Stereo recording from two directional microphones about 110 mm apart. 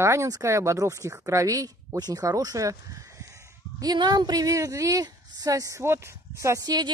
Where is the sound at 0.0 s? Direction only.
25° right (ahead or behind).